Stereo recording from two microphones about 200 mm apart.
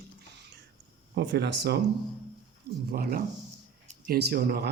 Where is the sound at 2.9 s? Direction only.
50° right (ahead or behind).